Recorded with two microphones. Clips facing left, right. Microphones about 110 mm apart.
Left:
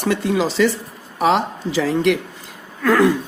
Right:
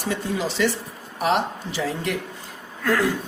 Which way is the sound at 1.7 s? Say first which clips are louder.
Left 10 dB; 85° left.